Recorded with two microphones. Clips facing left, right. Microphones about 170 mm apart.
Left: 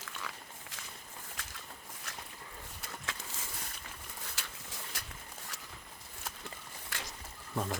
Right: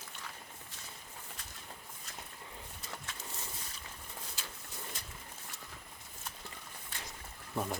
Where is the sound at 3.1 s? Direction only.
90° left.